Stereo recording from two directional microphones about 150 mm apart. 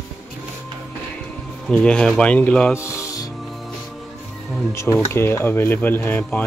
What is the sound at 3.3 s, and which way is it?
Music, centre (ahead or behind).